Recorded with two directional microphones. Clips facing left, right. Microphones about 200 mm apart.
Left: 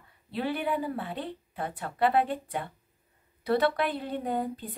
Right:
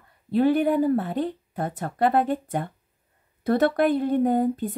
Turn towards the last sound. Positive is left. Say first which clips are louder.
# right 10 dB
turn(degrees=-45)  # may be behind; listen again after turning